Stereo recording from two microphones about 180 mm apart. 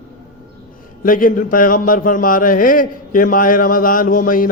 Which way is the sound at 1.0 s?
50° left (ahead or behind).